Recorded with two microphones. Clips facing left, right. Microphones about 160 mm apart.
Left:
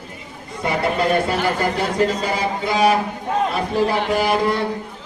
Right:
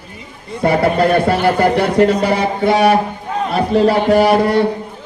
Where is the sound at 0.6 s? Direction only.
60° right (ahead or behind).